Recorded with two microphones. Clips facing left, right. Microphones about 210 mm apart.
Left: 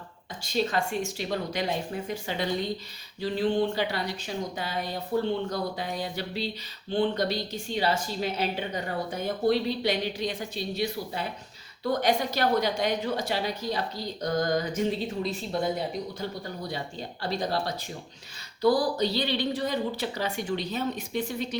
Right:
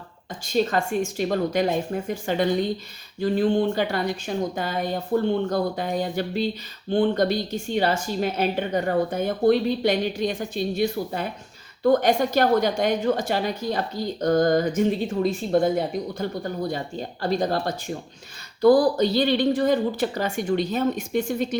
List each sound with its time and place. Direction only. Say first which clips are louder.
0.4 s a woman's voice: right 5 dB; 50° right (ahead or behind)